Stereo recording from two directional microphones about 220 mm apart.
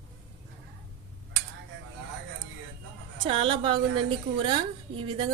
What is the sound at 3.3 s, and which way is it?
A woman's voice, 25° right (ahead or behind).